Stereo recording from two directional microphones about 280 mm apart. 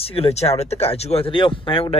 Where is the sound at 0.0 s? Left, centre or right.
Left.